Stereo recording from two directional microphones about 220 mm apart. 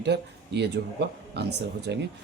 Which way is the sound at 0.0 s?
50° right (ahead or behind).